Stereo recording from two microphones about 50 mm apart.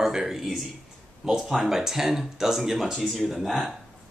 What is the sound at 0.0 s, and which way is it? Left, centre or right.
Speech, centre.